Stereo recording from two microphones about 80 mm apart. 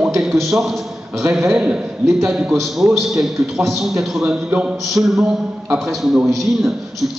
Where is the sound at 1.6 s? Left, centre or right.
Centre.